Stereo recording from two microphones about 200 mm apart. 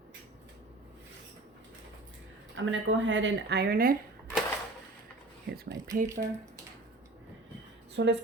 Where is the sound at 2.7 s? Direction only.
70° right (ahead or behind); by 3.9 s 45° right (ahead or behind).